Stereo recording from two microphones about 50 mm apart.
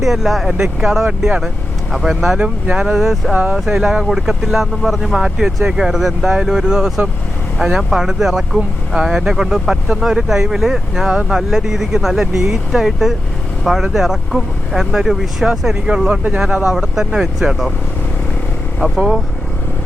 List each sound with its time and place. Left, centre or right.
0.0 s speech: centre
2.4 s speech: centre
2.9 s speech: centre
3.3 s speech: centre
18.8 s speech: centre